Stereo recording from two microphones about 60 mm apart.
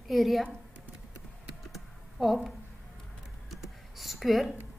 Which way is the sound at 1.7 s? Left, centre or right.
Centre.